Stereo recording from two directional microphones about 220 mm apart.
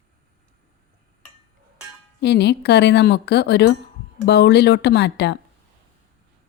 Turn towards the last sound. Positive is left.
turn(degrees=50)  # may be behind; listen again after turning